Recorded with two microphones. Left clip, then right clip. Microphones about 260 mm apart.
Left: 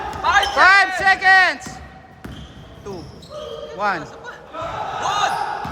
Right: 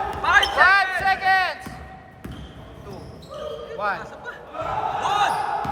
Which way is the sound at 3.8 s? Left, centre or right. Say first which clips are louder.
Left 4 dB; left.